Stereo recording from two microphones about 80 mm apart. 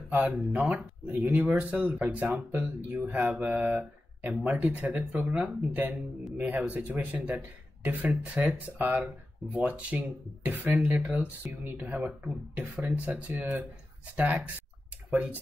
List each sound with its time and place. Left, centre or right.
0.3 s speech: centre